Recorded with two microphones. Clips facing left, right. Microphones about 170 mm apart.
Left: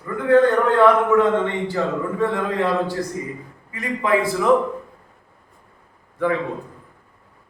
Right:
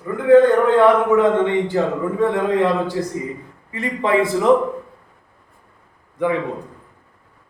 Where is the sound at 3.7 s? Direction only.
25° right (ahead or behind).